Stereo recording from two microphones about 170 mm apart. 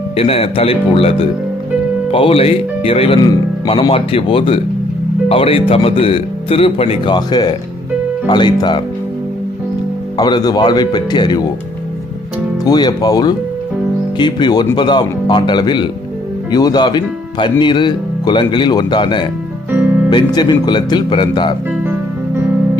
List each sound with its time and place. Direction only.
0.2 s speech: 35° left (ahead or behind)
10.2 s speech: 25° left (ahead or behind)
12.6 s speech: 25° left (ahead or behind)
19.7 s music: 10° right (ahead or behind)
20.1 s speech: 25° left (ahead or behind)